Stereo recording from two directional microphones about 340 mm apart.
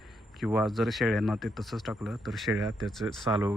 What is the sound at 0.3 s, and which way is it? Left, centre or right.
Speech, centre.